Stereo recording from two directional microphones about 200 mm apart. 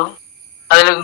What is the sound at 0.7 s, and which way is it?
Speech, 55° left (ahead or behind).